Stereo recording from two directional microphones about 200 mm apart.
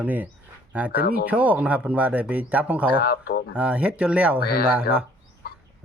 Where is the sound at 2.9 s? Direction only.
50° left (ahead or behind).